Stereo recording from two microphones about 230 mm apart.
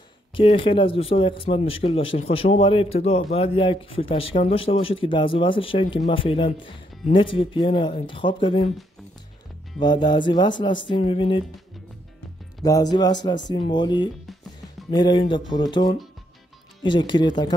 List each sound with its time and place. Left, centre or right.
0.3 s speech: left
9.8 s speech: centre
12.6 s speech: centre